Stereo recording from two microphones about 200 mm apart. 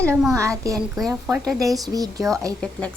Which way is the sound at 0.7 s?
15° right (ahead or behind).